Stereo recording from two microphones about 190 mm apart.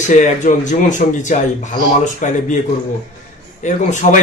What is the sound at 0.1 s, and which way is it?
Speech, 40° left (ahead or behind).